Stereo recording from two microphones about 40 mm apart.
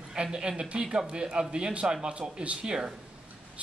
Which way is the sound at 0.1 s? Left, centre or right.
Centre.